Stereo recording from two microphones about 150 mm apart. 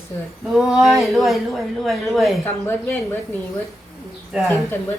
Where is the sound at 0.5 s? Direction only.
5° right (ahead or behind).